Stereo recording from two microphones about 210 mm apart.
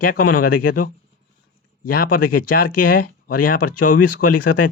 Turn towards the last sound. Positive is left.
turn(degrees=40)  # may be behind; listen again after turning